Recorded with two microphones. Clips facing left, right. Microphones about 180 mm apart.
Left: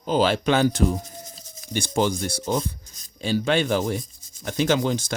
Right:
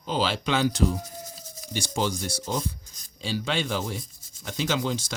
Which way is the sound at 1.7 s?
55° left (ahead or behind).